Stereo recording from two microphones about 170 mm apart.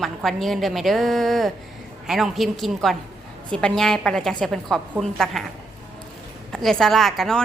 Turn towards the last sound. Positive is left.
turn(degrees=0)  # may be behind; listen again after turning